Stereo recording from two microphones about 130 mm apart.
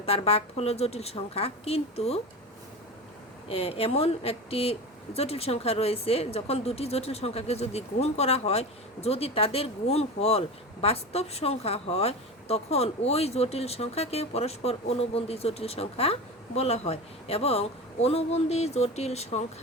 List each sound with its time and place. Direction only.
0.0 s speech: 45° left (ahead or behind)
3.5 s speech: 45° left (ahead or behind)